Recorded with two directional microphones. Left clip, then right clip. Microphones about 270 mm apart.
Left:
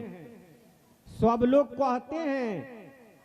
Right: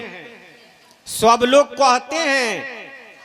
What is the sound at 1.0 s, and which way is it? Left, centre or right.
A man's voice, centre.